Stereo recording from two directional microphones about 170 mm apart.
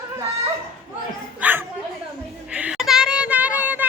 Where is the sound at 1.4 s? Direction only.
10° right (ahead or behind).